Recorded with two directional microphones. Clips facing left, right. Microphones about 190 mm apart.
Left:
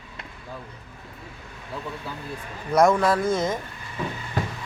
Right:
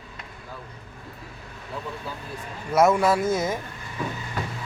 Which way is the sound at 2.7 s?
5° right (ahead or behind).